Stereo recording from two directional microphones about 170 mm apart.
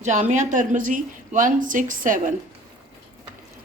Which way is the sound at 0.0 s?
45° right (ahead or behind).